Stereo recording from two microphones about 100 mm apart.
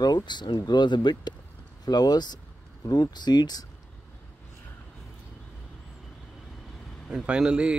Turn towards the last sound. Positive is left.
turn(degrees=-10)  # may be behind; listen again after turning